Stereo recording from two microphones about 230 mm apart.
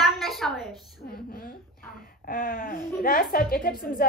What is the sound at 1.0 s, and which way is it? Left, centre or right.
A woman's voice, left.